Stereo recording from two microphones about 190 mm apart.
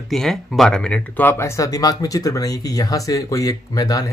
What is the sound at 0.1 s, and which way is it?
Speech, centre (ahead or behind).